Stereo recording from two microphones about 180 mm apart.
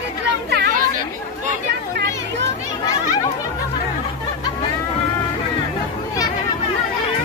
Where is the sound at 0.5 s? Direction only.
65° right (ahead or behind).